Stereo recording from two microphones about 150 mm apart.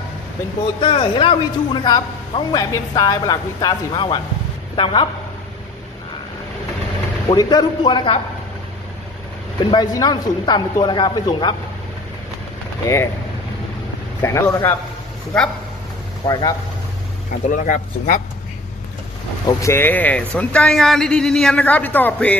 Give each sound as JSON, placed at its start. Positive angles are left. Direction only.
{"t": 0.7, "sound": "a man's voice", "side_deg": 35}
{"t": 7.2, "sound": "a man's voice", "side_deg": 25}
{"t": 9.7, "sound": "speech", "side_deg": 25}
{"t": 12.8, "sound": "speech", "side_deg": 20}
{"t": 14.2, "sound": "speech", "side_deg": 20}
{"t": 16.3, "sound": "speech", "side_deg": 25}
{"t": 17.5, "sound": "speech", "side_deg": 60}
{"t": 19.4, "sound": "a man's voice", "side_deg": 20}